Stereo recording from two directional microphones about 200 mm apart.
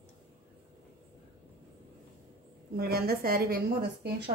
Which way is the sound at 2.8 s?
50° right (ahead or behind).